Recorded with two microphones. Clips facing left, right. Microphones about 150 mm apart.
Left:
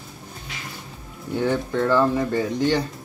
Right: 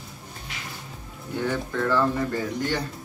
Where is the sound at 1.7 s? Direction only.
25° left (ahead or behind).